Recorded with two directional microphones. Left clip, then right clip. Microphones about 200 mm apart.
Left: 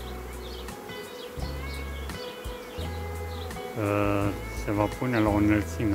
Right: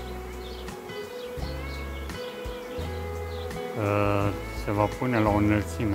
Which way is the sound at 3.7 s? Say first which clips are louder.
Right 1 dB; 15° right (ahead or behind).